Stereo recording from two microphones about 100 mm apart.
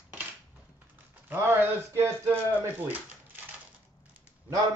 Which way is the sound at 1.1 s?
20° right (ahead or behind).